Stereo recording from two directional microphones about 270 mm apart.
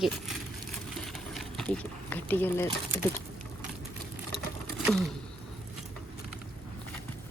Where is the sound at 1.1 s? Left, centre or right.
Centre.